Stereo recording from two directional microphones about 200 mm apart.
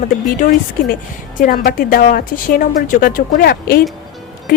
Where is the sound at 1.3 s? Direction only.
45° left (ahead or behind).